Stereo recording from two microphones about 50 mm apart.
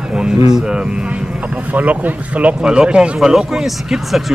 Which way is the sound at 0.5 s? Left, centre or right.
Centre.